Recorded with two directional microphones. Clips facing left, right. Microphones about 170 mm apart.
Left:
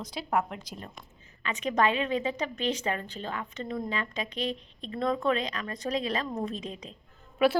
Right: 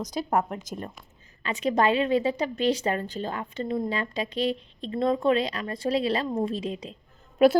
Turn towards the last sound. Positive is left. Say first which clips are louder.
# right 6 dB
turn(degrees=-40)  # may be behind; listen again after turning